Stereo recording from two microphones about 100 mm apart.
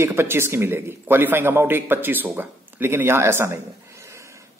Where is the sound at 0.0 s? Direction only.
25° right (ahead or behind).